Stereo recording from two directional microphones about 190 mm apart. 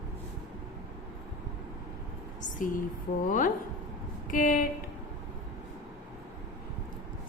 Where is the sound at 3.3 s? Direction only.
45° left (ahead or behind).